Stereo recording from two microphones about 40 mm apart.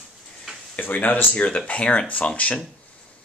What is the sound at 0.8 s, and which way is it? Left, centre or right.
Speech, left.